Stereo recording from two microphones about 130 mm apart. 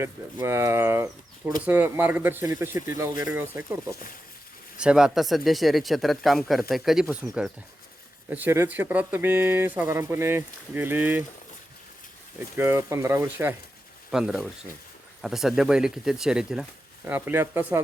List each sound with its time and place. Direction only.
0.4 s speech: 20° right (ahead or behind)
2.5 s speech: 25° right (ahead or behind)
4.8 s speech: 5° right (ahead or behind)
12.5 s speech: 20° right (ahead or behind)
14.1 s speech: 5° right (ahead or behind)